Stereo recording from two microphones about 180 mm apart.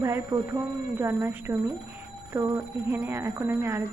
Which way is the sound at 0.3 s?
25° right (ahead or behind).